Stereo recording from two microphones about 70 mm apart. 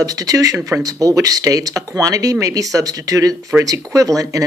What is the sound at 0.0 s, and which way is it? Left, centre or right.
Speech, right.